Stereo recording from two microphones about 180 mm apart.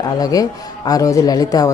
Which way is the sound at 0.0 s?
20° left (ahead or behind).